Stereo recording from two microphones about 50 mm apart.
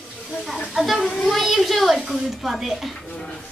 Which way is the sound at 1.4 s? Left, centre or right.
Centre.